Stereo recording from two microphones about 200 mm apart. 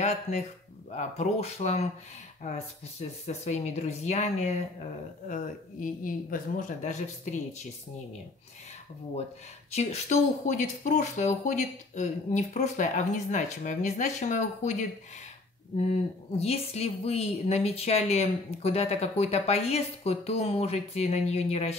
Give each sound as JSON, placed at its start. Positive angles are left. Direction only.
{"t": 0.0, "sound": "speech", "side_deg": 35}
{"t": 9.8, "sound": "speech", "side_deg": 35}
{"t": 16.3, "sound": "speech", "side_deg": 30}